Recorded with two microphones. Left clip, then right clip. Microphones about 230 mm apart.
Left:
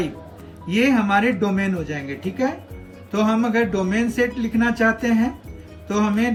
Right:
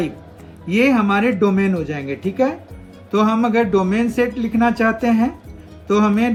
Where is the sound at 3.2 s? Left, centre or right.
Centre.